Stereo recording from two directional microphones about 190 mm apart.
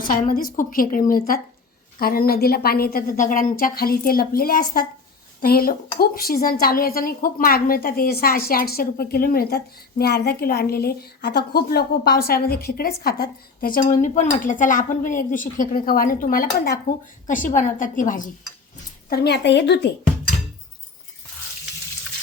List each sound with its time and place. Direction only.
0.0 s a woman's voice: 50° left (ahead or behind)
17.2 s speech: 45° left (ahead or behind)
19.1 s a woman's voice: 60° left (ahead or behind)